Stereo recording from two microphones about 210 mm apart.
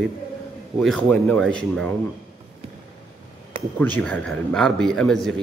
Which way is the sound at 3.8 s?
5° left (ahead or behind).